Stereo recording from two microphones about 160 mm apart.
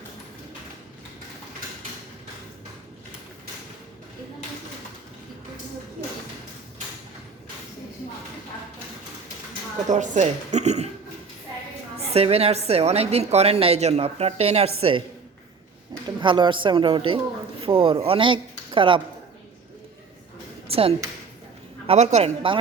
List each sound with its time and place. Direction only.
9.9 s speech: 50° right (ahead or behind)
12.1 s a woman's voice: 40° right (ahead or behind)
16.0 s a woman's voice: 30° right (ahead or behind)
20.7 s a sound: 35° right (ahead or behind)
21.8 s a woman's voice: 45° right (ahead or behind)